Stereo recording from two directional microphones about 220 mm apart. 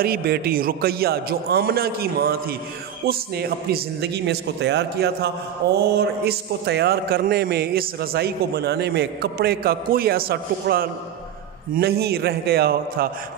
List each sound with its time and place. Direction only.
0.0 s a man's voice: 45° right (ahead or behind)